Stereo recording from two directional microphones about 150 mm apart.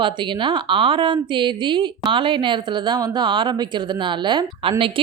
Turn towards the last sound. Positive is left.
turn(degrees=-35)  # may be behind; listen again after turning